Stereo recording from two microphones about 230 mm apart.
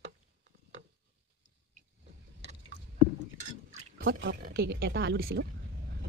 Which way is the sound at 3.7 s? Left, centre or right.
Right.